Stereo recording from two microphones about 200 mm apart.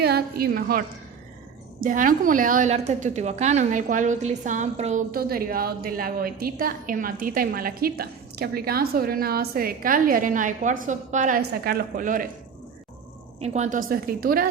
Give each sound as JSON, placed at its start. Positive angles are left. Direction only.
{"t": 0.0, "sound": "a woman's voice", "side_deg": -50}
{"t": 5.1, "sound": "a woman's voice", "side_deg": -45}
{"t": 13.4, "sound": "a woman's voice", "side_deg": -35}